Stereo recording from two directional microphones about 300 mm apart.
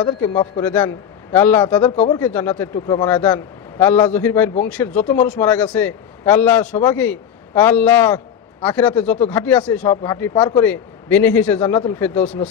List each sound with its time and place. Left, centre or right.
0.0 s a man's voice: centre